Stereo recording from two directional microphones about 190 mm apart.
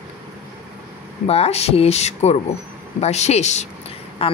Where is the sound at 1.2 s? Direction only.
30° left (ahead or behind).